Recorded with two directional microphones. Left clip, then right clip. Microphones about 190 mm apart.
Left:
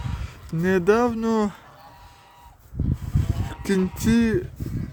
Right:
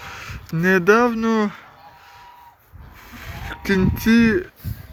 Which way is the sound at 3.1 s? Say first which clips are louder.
Right 1 dB; 20° left (ahead or behind).